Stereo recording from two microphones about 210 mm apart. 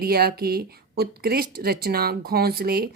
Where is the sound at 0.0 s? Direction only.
45° right (ahead or behind).